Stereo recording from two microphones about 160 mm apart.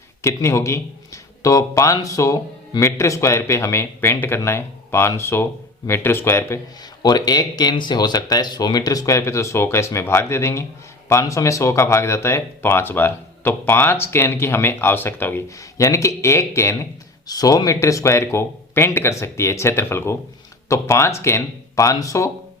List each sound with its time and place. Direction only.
0.2 s speech: 20° left (ahead or behind)